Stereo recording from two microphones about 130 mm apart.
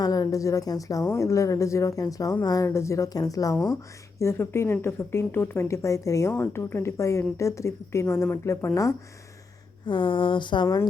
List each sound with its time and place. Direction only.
0.0 s a woman's voice: 30° left (ahead or behind)
9.8 s speech: 40° left (ahead or behind)